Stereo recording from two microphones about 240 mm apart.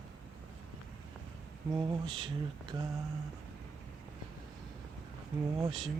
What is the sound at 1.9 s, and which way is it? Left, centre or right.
Speech, centre.